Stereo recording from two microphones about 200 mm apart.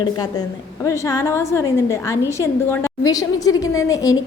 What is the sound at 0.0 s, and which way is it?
A woman's voice, 20° left (ahead or behind).